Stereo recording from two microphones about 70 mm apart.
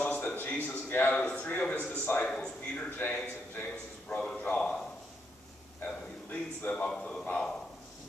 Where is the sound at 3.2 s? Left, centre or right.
Left.